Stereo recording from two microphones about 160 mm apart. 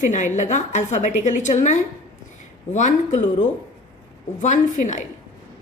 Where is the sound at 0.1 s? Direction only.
50° left (ahead or behind).